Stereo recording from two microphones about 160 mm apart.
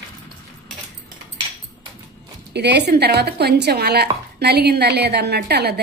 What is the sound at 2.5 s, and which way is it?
A woman's voice, 90° right.